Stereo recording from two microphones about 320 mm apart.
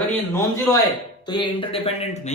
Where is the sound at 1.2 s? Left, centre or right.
Centre.